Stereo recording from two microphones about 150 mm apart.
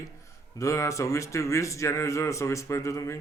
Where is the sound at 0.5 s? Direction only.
20° left (ahead or behind).